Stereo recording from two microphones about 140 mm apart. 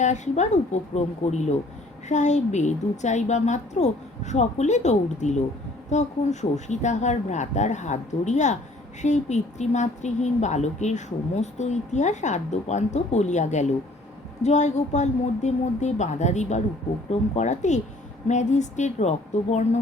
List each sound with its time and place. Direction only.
0.0 s speech: 55° left (ahead or behind)